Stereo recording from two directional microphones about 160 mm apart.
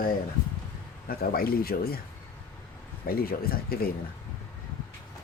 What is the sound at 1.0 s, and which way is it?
Speech, 65° left (ahead or behind).